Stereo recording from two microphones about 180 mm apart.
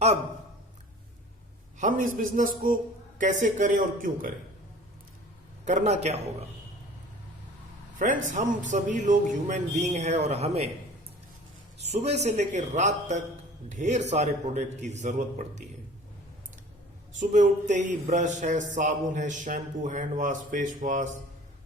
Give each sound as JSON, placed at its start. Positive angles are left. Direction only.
{"t": 1.8, "sound": "a man's voice", "side_deg": -45}
{"t": 5.6, "sound": "a man's voice", "side_deg": -40}
{"t": 7.9, "sound": "a man's voice", "side_deg": -45}
{"t": 11.8, "sound": "a man's voice", "side_deg": -35}
{"t": 17.2, "sound": "a man's voice", "side_deg": -45}